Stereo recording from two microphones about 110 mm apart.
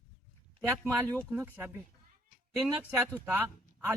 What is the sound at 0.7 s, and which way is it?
Speech, 20° right (ahead or behind).